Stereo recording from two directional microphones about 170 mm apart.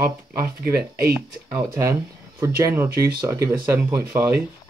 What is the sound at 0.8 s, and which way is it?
Speech, 65° right (ahead or behind).